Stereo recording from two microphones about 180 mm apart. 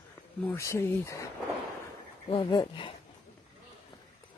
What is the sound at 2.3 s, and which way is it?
Speech, 25° left (ahead or behind).